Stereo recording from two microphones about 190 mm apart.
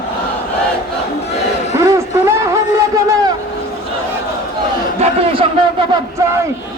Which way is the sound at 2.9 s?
15° right (ahead or behind).